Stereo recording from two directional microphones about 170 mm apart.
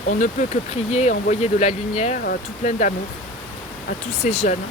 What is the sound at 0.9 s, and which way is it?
Speech, 40° left (ahead or behind).